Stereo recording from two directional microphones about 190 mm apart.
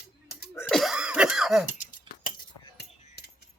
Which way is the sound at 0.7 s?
5° right (ahead or behind).